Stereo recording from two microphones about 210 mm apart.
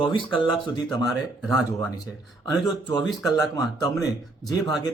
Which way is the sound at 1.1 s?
Centre (ahead or behind).